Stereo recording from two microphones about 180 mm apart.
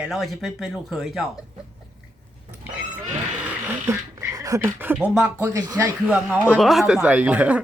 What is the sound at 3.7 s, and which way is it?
Speech, 15° right (ahead or behind).